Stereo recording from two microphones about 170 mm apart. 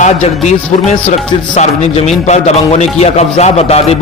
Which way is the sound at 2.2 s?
40° left (ahead or behind).